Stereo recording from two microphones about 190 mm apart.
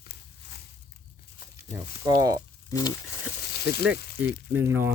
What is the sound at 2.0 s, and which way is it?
Speech, 20° right (ahead or behind).